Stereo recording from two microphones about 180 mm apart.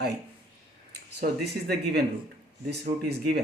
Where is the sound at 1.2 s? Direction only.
65° right (ahead or behind).